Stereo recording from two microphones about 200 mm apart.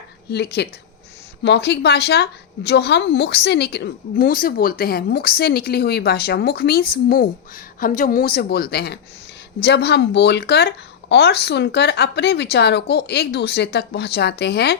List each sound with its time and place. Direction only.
0.3 s speech: 55° left (ahead or behind)